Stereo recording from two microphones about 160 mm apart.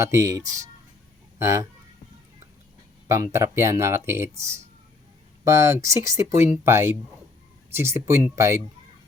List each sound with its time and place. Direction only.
0.0 s speech: 20° right (ahead or behind)
3.3 s speech: 20° right (ahead or behind)